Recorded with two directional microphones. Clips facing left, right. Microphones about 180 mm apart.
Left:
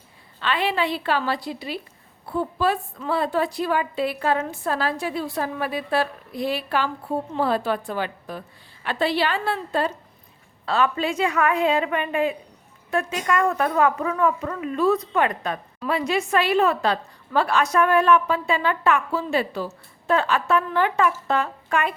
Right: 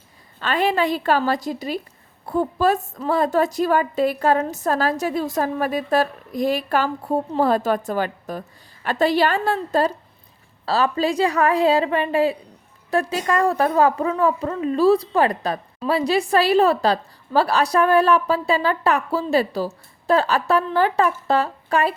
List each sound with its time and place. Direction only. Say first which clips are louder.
0.3 s a woman's voice: right 3 dB; 45° right (ahead or behind)